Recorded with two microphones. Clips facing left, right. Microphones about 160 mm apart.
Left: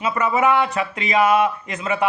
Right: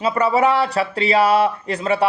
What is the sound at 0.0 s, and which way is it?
Speech, 35° right (ahead or behind).